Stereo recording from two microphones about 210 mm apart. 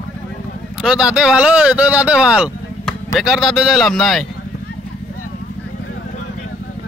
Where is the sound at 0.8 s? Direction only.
Centre (ahead or behind).